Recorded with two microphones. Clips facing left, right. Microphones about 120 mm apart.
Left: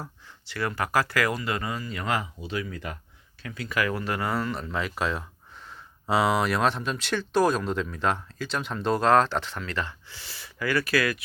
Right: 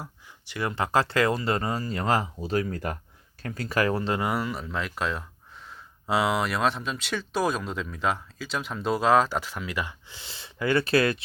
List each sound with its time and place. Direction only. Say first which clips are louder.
0.0 s speech: left 1 dB; 15° right (ahead or behind)